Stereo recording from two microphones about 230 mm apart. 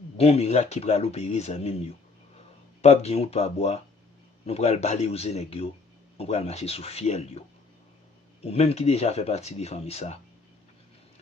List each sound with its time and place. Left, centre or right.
0.2 s speech: left
8.4 s speech: left